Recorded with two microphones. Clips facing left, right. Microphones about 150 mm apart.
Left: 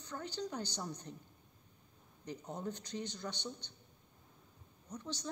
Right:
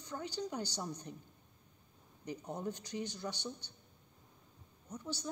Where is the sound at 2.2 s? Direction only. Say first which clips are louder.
Right 2 dB; 10° right (ahead or behind).